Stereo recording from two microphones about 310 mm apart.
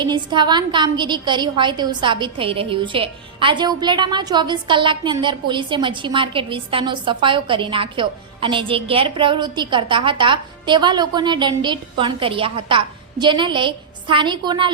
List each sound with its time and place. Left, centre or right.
0.0 s a woman's voice: centre